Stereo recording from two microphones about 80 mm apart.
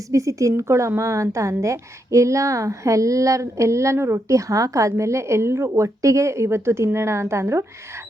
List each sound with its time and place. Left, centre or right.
0.1 s a woman's voice: right